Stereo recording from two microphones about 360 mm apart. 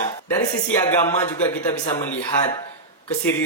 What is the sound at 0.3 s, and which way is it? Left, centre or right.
Speech, centre.